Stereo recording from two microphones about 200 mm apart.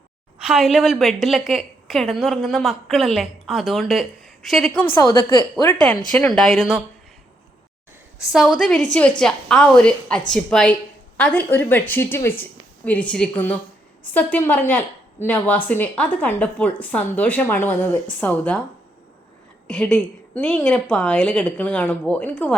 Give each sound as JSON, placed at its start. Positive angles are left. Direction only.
{"t": 0.3, "sound": "a woman's voice", "side_deg": -5}
{"t": 6.1, "sound": "a woman's voice", "side_deg": 5}
{"t": 8.3, "sound": "a woman's voice", "side_deg": 0}
{"t": 19.6, "sound": "a woman's voice", "side_deg": 5}